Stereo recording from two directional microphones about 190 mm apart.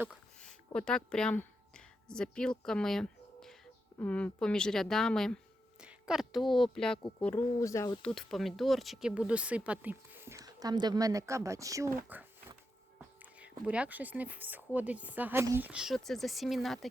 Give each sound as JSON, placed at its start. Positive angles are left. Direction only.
{"t": 0.3, "sound": "a sound", "side_deg": 5}
{"t": 3.9, "sound": "a woman's voice", "side_deg": 5}
{"t": 8.0, "sound": "speech", "side_deg": 0}